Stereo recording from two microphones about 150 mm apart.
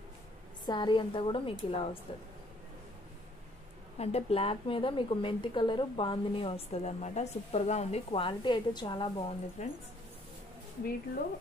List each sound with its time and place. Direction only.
0.7 s a woman's voice: 30° left (ahead or behind)
4.0 s a woman's voice: 40° left (ahead or behind)
9.6 s a woman's voice: 50° left (ahead or behind)